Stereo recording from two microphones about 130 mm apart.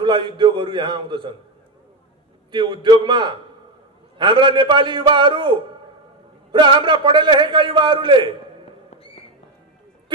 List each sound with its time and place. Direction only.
0.0 s a man's voice: 35° right (ahead or behind)
2.5 s a man's voice: 35° right (ahead or behind)